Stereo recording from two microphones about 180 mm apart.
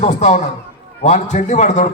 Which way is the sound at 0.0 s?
40° left (ahead or behind).